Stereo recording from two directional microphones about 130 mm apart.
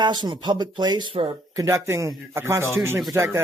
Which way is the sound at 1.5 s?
25° right (ahead or behind).